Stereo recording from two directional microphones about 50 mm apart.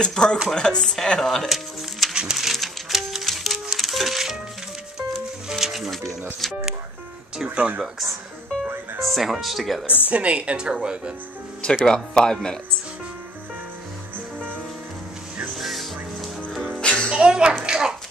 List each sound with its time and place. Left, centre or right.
0.0 s speech: centre
2.3 s music: centre
5.5 s music: centre
7.5 s speech: right
9.1 s speech: centre
10.0 s speech: right
11.8 s speech: centre
15.5 s music: centre
16.8 s music: centre
17.1 s music: centre
17.6 s a sound: centre